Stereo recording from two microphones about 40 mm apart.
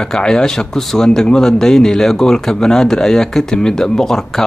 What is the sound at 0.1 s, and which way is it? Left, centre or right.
Speech, centre.